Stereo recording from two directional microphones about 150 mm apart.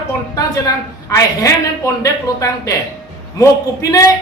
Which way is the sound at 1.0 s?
20° left (ahead or behind).